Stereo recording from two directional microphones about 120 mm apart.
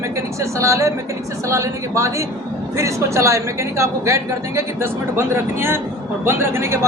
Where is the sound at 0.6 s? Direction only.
25° right (ahead or behind).